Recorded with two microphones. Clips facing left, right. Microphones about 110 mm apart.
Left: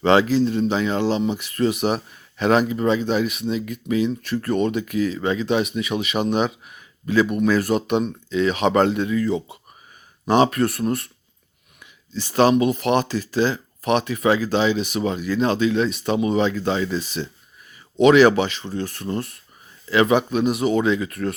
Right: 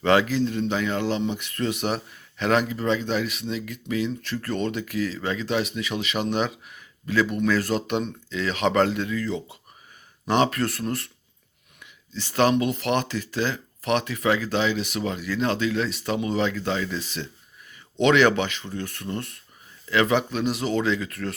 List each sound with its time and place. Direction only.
0.0 s speech: 20° left (ahead or behind)